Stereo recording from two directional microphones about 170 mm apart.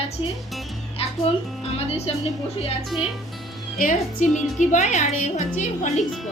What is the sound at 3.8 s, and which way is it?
A woman's voice, 55° left (ahead or behind).